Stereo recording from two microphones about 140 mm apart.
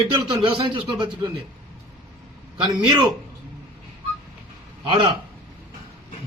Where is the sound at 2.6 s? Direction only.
30° right (ahead or behind).